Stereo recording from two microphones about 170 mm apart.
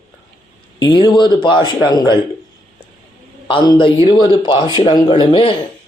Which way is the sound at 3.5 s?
30° left (ahead or behind).